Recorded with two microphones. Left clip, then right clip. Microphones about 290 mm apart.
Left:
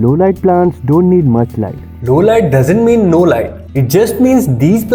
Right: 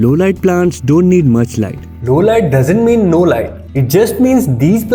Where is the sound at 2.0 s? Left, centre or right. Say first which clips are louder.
Left 1 dB; right.